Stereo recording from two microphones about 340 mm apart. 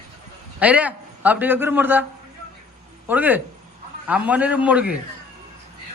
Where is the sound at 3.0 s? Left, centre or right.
Centre.